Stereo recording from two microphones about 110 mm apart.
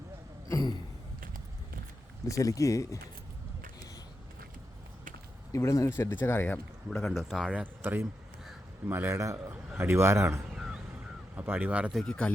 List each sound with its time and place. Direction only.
0.4 s a sound: 35° left (ahead or behind)
2.2 s speech: 30° left (ahead or behind)
5.5 s speech: 25° left (ahead or behind)
7.0 s speech: centre (ahead or behind)
7.6 s a man's voice: 15° right (ahead or behind)
10.5 s a sound: 5° right (ahead or behind)
11.3 s speech: 15° right (ahead or behind)
11.9 s speech: 5° left (ahead or behind)